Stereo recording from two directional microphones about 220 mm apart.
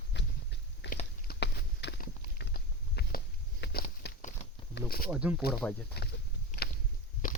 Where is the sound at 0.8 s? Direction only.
50° left (ahead or behind).